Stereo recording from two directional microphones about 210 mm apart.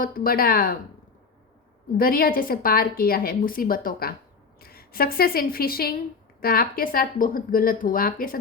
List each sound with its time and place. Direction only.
0.0 s a woman's voice: 40° left (ahead or behind)
2.0 s a woman's voice: 45° left (ahead or behind)